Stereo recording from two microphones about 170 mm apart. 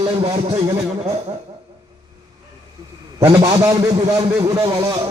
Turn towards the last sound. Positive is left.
turn(degrees=-20)  # may be behind; listen again after turning